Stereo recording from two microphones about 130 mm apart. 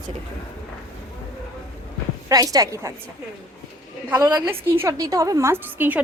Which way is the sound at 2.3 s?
25° right (ahead or behind).